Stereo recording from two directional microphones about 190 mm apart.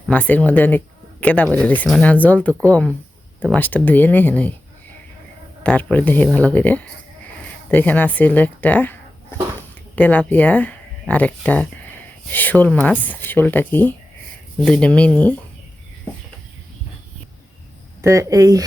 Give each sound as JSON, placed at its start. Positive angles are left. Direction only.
{"t": 0.1, "sound": "speech", "side_deg": 10}
{"t": 3.6, "sound": "speech", "side_deg": 10}
{"t": 5.6, "sound": "speech", "side_deg": 10}
{"t": 18.0, "sound": "speech", "side_deg": -15}